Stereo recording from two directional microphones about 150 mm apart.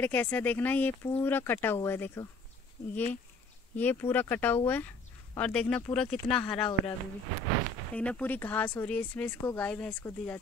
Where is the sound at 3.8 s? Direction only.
15° left (ahead or behind).